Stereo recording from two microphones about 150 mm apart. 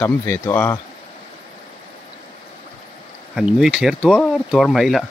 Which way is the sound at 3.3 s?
5° right (ahead or behind).